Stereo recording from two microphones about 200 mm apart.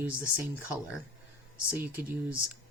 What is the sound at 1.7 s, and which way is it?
Speech, 10° right (ahead or behind).